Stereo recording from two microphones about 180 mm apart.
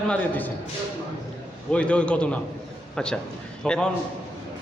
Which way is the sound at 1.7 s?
5° left (ahead or behind).